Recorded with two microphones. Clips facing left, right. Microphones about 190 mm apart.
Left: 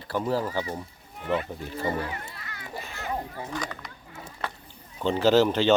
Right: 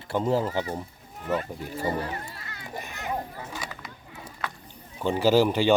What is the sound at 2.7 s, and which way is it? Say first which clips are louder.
Children playing: right 1 dB; 20° right (ahead or behind).